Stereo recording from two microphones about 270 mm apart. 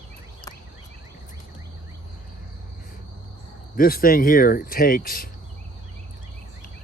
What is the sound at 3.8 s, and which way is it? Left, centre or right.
Speech, left.